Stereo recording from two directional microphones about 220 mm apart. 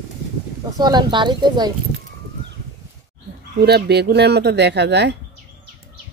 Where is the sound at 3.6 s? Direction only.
45° right (ahead or behind).